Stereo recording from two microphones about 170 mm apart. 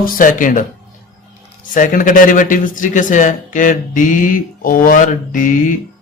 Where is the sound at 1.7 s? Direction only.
50° left (ahead or behind).